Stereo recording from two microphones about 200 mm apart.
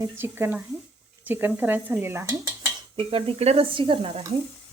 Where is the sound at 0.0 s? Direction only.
10° right (ahead or behind).